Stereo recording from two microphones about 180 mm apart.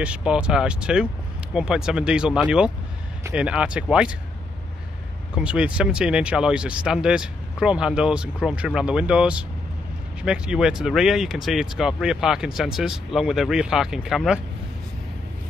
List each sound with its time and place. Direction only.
0.0 s speech: 5° right (ahead or behind)
5.3 s speech: 5° right (ahead or behind)